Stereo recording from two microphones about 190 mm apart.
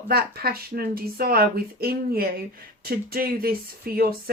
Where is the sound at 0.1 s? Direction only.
55° right (ahead or behind).